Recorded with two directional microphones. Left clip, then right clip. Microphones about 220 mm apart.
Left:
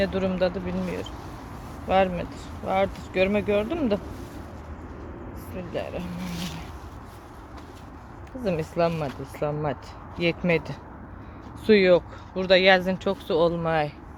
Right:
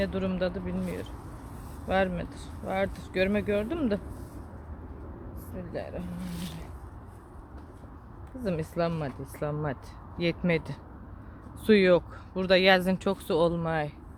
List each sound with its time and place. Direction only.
0.0 s speech: 5° right (ahead or behind)
5.7 s speech: centre (ahead or behind)
8.4 s speech: 10° right (ahead or behind)